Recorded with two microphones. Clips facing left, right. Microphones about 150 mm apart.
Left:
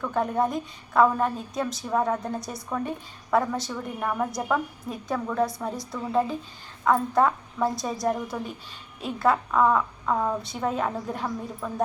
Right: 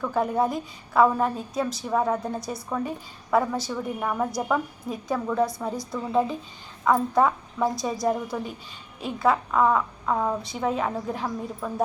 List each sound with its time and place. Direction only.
0.0 s a woman's voice: 5° right (ahead or behind)